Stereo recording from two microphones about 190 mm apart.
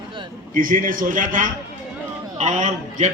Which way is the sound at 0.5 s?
45° right (ahead or behind).